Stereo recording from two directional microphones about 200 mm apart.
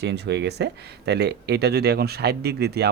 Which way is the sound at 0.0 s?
55° right (ahead or behind).